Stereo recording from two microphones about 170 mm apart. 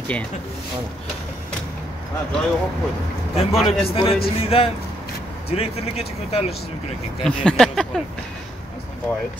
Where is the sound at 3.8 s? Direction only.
35° left (ahead or behind).